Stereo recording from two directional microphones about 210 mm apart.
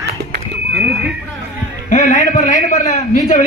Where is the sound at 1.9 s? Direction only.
35° left (ahead or behind).